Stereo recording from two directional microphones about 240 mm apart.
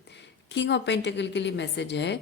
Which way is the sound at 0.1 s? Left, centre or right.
Left.